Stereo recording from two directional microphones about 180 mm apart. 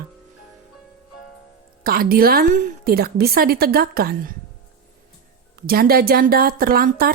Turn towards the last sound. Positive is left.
turn(degrees=-55)  # may be behind; listen again after turning